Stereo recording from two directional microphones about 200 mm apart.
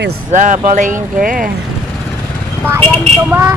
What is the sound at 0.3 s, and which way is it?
Speech, 40° right (ahead or behind).